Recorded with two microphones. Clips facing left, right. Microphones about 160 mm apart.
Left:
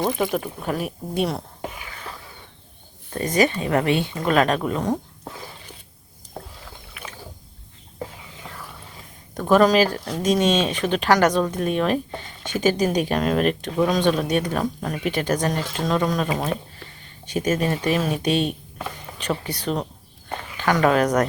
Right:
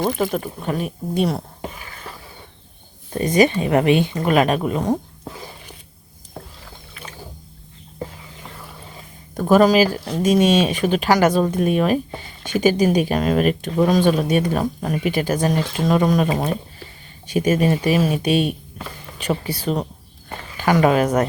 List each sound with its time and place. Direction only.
0.2 s speech: centre (ahead or behind)
3.1 s speech: 15° right (ahead or behind)
9.3 s speech: 5° right (ahead or behind)